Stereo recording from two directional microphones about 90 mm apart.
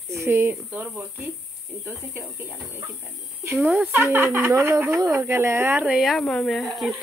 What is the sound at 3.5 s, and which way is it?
Speech, 15° right (ahead or behind).